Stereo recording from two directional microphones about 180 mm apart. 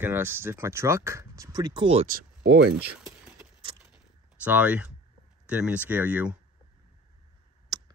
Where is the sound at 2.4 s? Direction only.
80° right.